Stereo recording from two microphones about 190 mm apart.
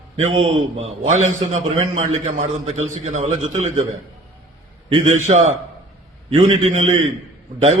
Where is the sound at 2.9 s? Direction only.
35° right (ahead or behind).